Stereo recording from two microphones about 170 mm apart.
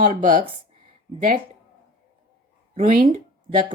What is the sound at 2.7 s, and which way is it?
Speech, 55° right (ahead or behind).